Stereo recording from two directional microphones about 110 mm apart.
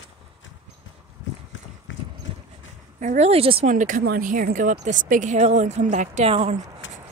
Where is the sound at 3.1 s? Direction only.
65° right (ahead or behind).